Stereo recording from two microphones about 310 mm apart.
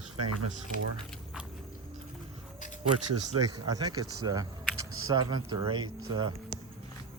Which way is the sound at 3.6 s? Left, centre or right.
Centre.